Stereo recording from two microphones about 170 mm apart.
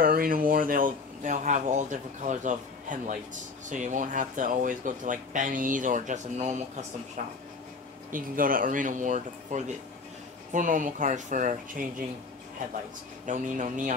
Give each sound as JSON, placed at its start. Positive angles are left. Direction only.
{"t": 0.0, "sound": "a sound", "side_deg": -60}
{"t": 0.5, "sound": "speech", "side_deg": -55}
{"t": 8.1, "sound": "speech", "side_deg": -55}
{"t": 13.3, "sound": "speech", "side_deg": -45}